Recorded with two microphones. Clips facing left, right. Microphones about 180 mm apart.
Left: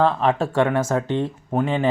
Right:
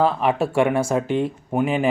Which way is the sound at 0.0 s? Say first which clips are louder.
Even; 10° right (ahead or behind).